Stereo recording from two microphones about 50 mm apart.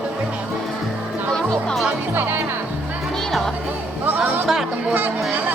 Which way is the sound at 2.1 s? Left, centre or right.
Right.